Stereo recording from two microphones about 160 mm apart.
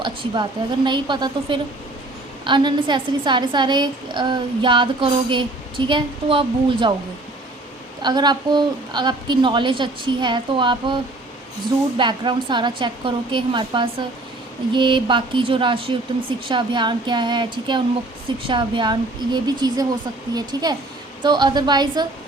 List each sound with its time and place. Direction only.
0.0 s a woman's voice: 30° right (ahead or behind)
8.0 s a woman's voice: 25° right (ahead or behind)
14.7 s a sound: 30° right (ahead or behind)
16.5 s a woman's voice: 30° right (ahead or behind)